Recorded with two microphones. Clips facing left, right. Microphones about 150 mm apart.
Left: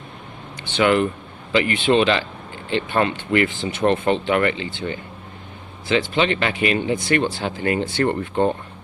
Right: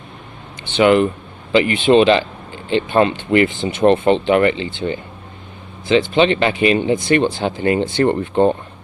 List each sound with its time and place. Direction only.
0.8 s speech: 20° right (ahead or behind)